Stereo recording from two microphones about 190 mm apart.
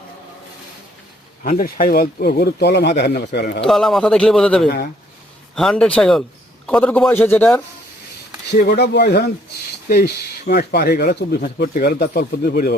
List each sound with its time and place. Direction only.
1.5 s speech: 50° left (ahead or behind)
3.6 s a man's voice: centre (ahead or behind)
8.5 s speech: 60° left (ahead or behind)